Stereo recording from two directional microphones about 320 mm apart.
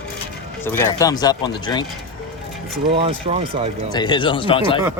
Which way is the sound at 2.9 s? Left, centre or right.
Centre.